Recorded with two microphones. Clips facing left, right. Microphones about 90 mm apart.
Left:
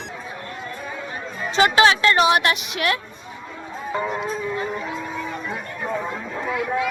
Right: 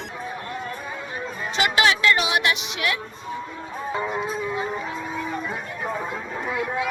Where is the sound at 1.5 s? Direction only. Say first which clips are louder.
Left 5 dB; 35° left (ahead or behind); by 2.9 s 50° left (ahead or behind).